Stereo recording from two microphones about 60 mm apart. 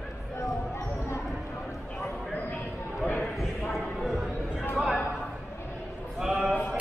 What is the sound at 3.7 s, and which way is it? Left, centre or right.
Basketball bounce, centre.